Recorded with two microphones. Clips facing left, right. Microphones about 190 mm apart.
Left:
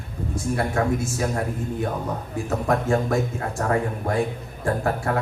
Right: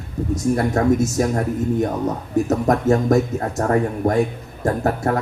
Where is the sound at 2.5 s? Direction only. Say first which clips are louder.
Right 3 dB; 40° right (ahead or behind).